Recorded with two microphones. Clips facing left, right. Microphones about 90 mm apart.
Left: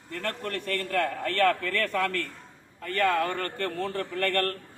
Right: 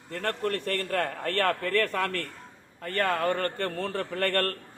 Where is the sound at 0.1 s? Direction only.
35° right (ahead or behind).